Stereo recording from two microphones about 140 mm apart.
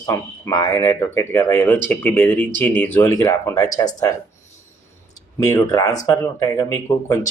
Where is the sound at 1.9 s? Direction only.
10° left (ahead or behind).